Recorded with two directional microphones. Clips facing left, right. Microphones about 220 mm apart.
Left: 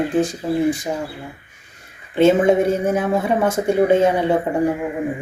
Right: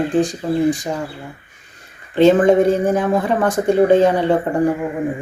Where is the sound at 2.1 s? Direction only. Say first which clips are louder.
Right 2 dB; 5° left (ahead or behind).